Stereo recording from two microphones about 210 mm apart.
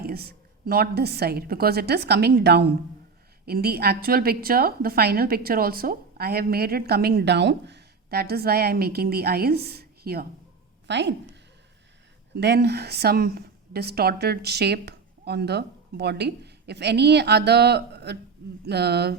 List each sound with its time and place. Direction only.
0.0 s a woman's voice: 45° right (ahead or behind)
12.4 s a woman's voice: 50° right (ahead or behind)